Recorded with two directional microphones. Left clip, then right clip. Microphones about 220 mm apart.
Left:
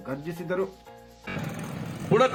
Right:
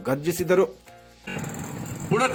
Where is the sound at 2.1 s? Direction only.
15° right (ahead or behind).